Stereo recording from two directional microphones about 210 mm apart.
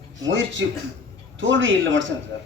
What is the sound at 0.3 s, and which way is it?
Speech, 60° right (ahead or behind).